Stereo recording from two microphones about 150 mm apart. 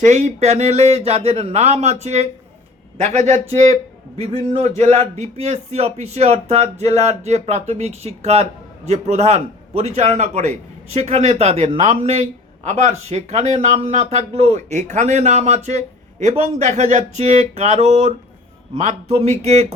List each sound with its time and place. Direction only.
0.0 s speech: 50° right (ahead or behind)